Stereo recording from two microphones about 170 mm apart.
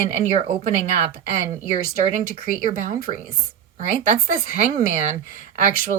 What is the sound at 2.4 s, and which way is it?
Speech, 55° right (ahead or behind).